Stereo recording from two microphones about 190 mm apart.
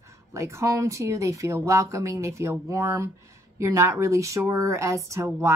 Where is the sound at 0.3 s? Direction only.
15° right (ahead or behind).